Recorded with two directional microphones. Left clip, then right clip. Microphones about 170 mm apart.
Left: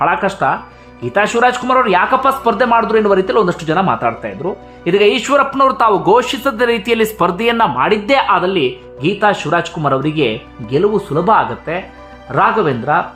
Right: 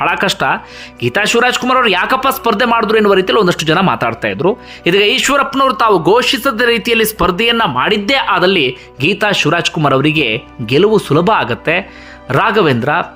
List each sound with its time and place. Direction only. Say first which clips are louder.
0.0 s speech: right 1 dB; 15° right (ahead or behind)
8.3 s speech: right 2 dB; 20° right (ahead or behind)